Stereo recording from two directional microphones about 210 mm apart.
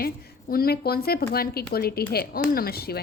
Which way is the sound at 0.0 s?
45° left (ahead or behind).